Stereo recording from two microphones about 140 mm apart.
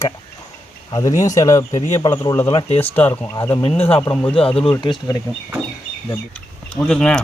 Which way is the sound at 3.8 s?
40° left (ahead or behind).